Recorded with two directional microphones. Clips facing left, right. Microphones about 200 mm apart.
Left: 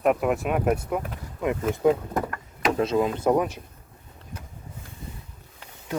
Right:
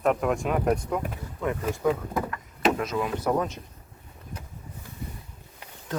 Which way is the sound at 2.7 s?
25° left (ahead or behind).